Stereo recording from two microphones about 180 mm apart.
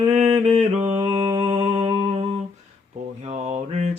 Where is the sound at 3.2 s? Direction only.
40° right (ahead or behind).